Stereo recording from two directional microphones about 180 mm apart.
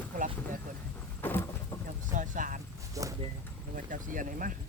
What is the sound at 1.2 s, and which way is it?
Vehicle, 10° left (ahead or behind).